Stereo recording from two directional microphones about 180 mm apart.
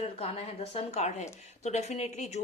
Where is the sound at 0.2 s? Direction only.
35° left (ahead or behind).